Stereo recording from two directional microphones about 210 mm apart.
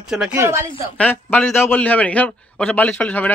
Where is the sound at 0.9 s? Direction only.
10° left (ahead or behind).